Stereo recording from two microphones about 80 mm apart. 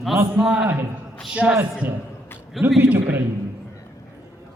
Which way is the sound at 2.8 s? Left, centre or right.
Right.